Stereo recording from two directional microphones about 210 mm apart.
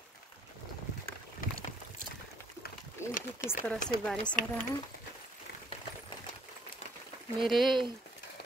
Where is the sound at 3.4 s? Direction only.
40° left (ahead or behind).